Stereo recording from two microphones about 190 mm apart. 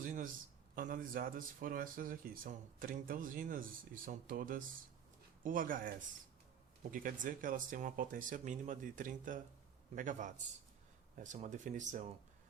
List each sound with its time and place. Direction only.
0.0 s a sound: 45° right (ahead or behind)
0.8 s speech: 45° right (ahead or behind)
6.9 s speech: 45° right (ahead or behind)